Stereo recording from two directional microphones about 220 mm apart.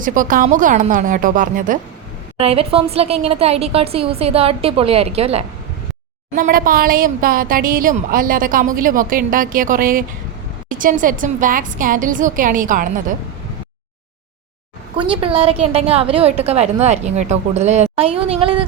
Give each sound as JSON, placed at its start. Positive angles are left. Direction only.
{"t": 0.0, "sound": "speech", "side_deg": -35}
{"t": 2.4, "sound": "a woman's voice", "side_deg": -25}
{"t": 6.3, "sound": "speech", "side_deg": -40}
{"t": 14.9, "sound": "a woman's voice", "side_deg": -25}